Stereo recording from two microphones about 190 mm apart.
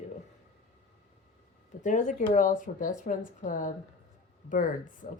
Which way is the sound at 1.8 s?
40° left (ahead or behind).